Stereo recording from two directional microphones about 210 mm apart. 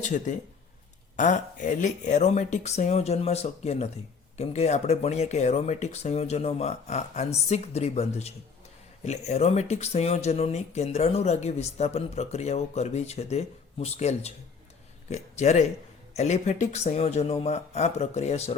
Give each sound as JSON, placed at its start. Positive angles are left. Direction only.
{"t": 0.0, "sound": "speech", "side_deg": 35}